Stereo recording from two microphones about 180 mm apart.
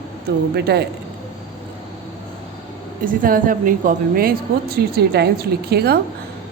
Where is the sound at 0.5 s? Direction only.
65° right (ahead or behind).